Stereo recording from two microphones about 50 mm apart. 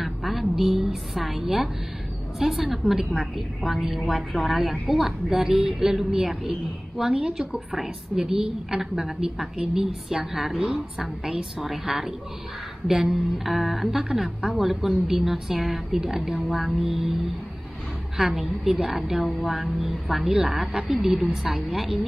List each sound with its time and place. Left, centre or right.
0.0 s a woman's voice: centre
18.1 s a woman's voice: centre
20.3 s a woman's voice: centre
21.7 s a woman's voice: centre